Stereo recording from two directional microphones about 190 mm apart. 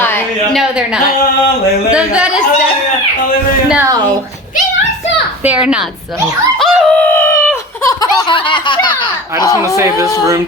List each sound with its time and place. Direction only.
0.5 s speech: 5° right (ahead or behind)
5.5 s speech: 5° right (ahead or behind)
6.6 s a sound: 5° left (ahead or behind); by 9.0 s 25° left (ahead or behind)
9.6 s speech: 15° right (ahead or behind)